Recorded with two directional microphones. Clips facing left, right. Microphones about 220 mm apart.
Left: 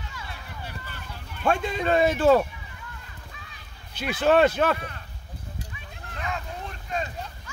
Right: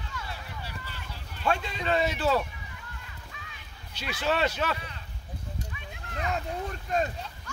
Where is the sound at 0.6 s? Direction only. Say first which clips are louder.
Left 2 dB; 55° left (ahead or behind).